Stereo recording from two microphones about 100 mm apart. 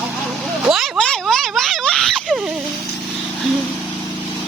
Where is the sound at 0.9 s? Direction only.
5° left (ahead or behind).